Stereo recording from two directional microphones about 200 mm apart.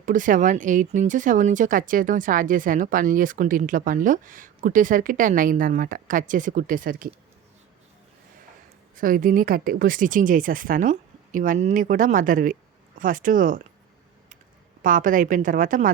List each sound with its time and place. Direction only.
0.0 s a woman's voice: 40° right (ahead or behind)
9.0 s a woman's voice: 45° right (ahead or behind)
14.8 s a woman's voice: 40° right (ahead or behind)